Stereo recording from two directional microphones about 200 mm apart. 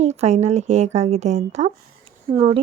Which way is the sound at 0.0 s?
35° right (ahead or behind).